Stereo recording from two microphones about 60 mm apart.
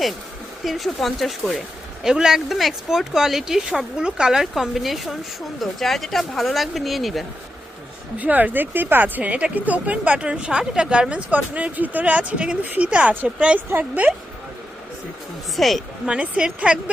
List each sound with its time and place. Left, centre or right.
0.6 s a woman's voice: centre
8.2 s speech: right
15.5 s speech: centre
16.0 s speech: right